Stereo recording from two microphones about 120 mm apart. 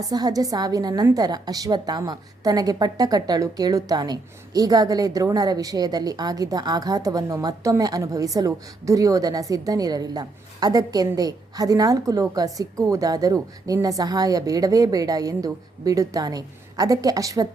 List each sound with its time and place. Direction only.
0.1 s a woman's voice: 30° right (ahead or behind)